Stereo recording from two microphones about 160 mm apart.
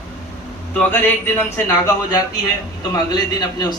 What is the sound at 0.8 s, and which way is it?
A man's voice, 10° left (ahead or behind).